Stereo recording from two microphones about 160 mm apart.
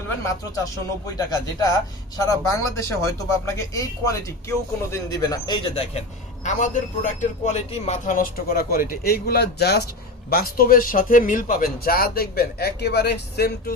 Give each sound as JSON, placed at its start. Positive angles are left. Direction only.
{"t": 0.5, "sound": "speech", "side_deg": 20}
{"t": 6.4, "sound": "a man's voice", "side_deg": 50}
{"t": 10.2, "sound": "speech", "side_deg": 70}